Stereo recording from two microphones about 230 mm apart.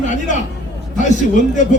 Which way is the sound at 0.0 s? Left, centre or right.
Left.